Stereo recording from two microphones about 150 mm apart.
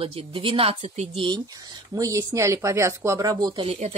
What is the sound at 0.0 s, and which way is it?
A woman's voice, 40° right (ahead or behind).